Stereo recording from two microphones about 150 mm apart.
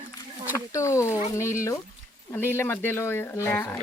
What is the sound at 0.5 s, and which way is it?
Speech, 20° left (ahead or behind).